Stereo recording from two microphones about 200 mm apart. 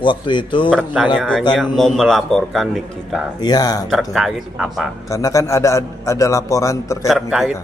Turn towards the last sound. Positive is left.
turn(degrees=0)  # may be behind; listen again after turning